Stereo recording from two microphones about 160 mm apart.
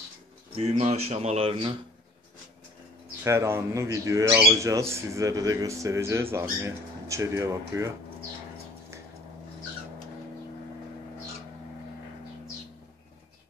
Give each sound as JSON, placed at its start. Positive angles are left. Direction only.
{"t": 0.6, "sound": "speech", "side_deg": -45}
{"t": 3.3, "sound": "speech", "side_deg": -15}